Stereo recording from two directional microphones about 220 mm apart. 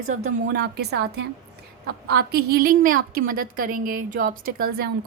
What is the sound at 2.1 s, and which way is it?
A woman's voice, 45° right (ahead or behind).